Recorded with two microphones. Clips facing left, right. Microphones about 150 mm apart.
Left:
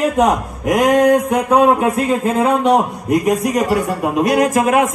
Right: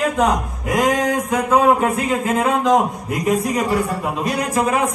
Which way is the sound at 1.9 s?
30° left (ahead or behind).